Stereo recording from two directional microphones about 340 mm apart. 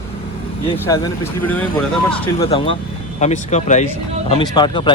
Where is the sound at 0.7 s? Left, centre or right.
Centre.